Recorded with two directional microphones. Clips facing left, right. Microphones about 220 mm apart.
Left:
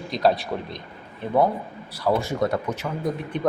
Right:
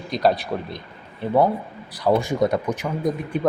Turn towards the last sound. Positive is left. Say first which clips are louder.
# right 3 dB
turn(degrees=-10)  # may be behind; listen again after turning